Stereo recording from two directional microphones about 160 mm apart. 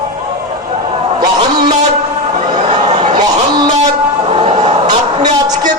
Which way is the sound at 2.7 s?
45° right (ahead or behind).